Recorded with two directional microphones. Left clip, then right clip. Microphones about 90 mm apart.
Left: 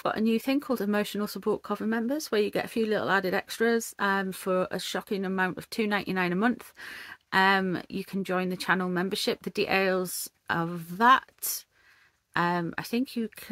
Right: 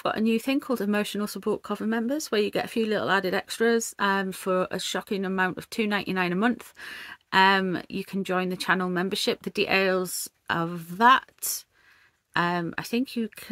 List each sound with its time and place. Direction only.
0.0 s speech: 20° right (ahead or behind)